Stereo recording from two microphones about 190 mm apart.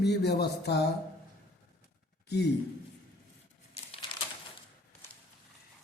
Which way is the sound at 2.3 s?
60° left (ahead or behind).